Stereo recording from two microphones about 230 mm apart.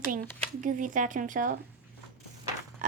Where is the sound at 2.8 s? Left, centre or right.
Right.